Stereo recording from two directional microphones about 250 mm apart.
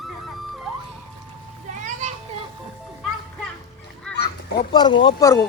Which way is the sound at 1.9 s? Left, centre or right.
Right.